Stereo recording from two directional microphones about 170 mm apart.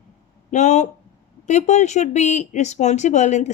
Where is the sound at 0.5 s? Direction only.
45° left (ahead or behind).